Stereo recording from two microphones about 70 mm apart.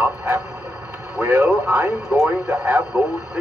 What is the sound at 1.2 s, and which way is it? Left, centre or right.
Speech, right.